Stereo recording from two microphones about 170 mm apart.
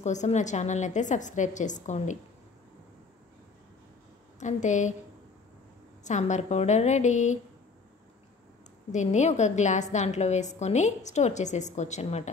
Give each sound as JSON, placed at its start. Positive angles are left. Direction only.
{"t": 0.0, "sound": "a woman's voice", "side_deg": 45}
{"t": 4.4, "sound": "a woman's voice", "side_deg": 45}
{"t": 6.0, "sound": "a woman's voice", "side_deg": 45}
{"t": 8.9, "sound": "a woman's voice", "side_deg": 45}